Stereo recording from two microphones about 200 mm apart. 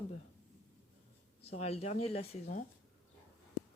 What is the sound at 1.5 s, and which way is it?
Speech, 35° left (ahead or behind).